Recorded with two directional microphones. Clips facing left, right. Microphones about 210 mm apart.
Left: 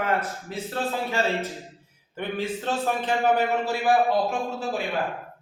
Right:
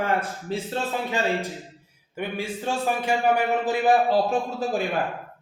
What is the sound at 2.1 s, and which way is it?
A man's voice, 10° right (ahead or behind).